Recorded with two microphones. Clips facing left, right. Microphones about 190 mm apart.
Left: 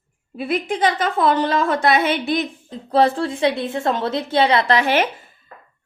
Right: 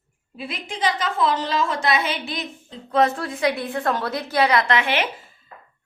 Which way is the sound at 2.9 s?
30° left (ahead or behind).